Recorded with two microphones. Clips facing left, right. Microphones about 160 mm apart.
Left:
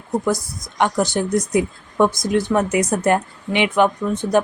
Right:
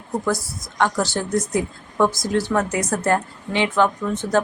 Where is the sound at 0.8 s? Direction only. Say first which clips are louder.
Left 3 dB; 15° left (ahead or behind).